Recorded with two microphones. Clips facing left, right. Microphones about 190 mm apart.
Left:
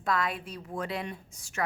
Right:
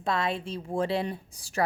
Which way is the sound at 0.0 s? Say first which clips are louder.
Right 2 dB; 25° right (ahead or behind).